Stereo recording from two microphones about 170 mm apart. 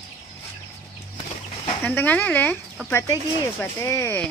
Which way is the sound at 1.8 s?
10° left (ahead or behind).